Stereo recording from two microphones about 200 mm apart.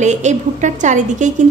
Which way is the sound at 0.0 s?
35° right (ahead or behind).